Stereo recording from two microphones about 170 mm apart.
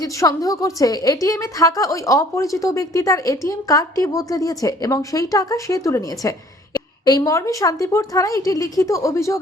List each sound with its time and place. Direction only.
0.0 s a woman's voice: 20° left (ahead or behind)